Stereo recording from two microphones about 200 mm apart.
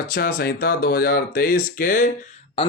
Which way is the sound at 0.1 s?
50° left (ahead or behind).